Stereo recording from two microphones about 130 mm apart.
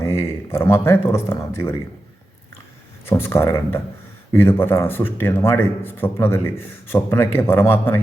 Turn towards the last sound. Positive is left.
turn(degrees=15)  # may be behind; listen again after turning